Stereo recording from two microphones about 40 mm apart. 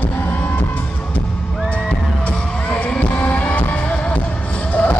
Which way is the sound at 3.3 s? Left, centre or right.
Left.